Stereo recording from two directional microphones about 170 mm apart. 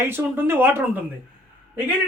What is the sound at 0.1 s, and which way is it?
Speech, 15° right (ahead or behind).